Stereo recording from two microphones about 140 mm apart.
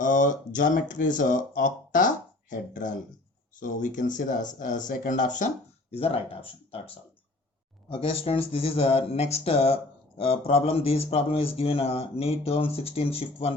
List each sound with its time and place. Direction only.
0.0 s speech: 65° left (ahead or behind)
5.9 s speech: 45° left (ahead or behind)
7.9 s speech: 40° left (ahead or behind)